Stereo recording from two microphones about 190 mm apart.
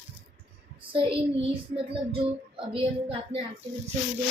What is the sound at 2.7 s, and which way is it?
Speech, 30° right (ahead or behind).